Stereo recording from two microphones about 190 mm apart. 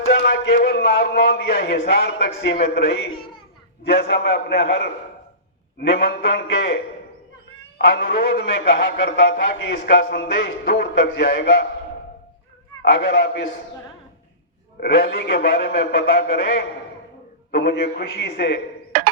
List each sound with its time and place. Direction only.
0.1 s a man's voice: 65° left (ahead or behind)
5.9 s a man's voice: 65° left (ahead or behind)
7.8 s a man's voice: 65° left (ahead or behind)
12.9 s a man's voice: 65° left (ahead or behind)
14.8 s a man's voice: 65° left (ahead or behind)